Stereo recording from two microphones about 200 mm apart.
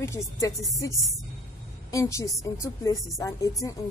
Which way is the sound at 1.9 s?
15° left (ahead or behind).